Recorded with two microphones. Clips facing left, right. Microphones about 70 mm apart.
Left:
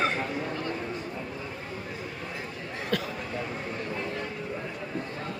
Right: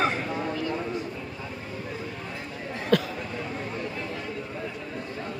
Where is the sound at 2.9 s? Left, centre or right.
Right.